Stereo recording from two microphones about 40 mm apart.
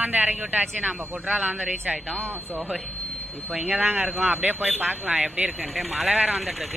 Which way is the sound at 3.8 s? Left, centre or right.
Right.